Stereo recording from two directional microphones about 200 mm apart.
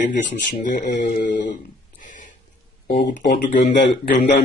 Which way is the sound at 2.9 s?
55° left (ahead or behind).